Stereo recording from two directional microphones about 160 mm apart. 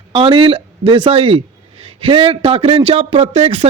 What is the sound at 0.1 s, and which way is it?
Speech, 30° right (ahead or behind).